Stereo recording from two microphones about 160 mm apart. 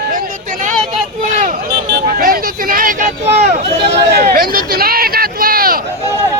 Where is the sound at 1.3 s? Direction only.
50° right (ahead or behind).